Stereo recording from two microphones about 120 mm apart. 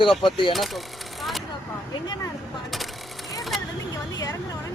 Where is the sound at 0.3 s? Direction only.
45° left (ahead or behind).